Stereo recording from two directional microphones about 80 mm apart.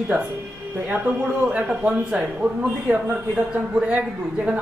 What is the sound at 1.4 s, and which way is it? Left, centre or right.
A woman's voice, centre.